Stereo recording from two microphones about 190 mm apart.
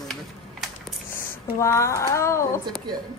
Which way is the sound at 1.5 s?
15° left (ahead or behind).